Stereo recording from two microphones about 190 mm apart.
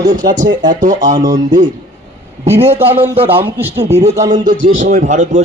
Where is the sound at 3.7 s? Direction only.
35° right (ahead or behind).